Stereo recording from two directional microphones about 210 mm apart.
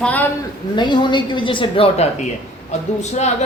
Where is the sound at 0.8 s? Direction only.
20° left (ahead or behind).